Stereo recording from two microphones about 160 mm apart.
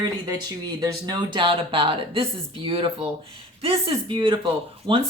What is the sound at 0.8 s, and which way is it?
Speech, 30° right (ahead or behind).